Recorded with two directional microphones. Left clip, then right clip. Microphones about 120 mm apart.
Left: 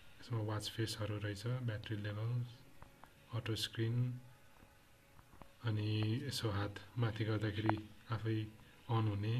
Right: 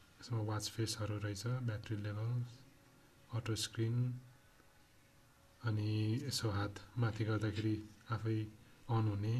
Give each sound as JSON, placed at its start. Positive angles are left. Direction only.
{"t": 0.2, "sound": "speech", "side_deg": -40}
{"t": 5.6, "sound": "speech", "side_deg": -40}